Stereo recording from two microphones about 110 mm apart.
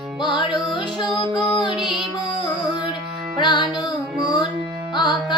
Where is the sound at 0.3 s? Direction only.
45° left (ahead or behind).